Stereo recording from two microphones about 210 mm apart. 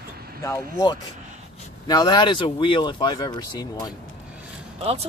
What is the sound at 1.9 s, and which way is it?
Speech, 20° left (ahead or behind).